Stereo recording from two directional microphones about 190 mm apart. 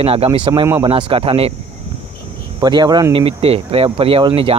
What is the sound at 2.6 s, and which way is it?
Speech, 20° right (ahead or behind).